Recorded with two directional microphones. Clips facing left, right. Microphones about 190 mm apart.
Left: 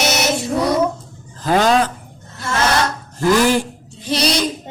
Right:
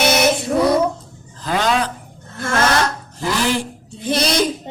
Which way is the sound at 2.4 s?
50° right (ahead or behind).